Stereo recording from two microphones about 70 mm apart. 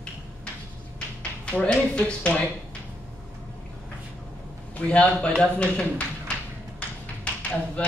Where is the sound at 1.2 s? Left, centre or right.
Centre.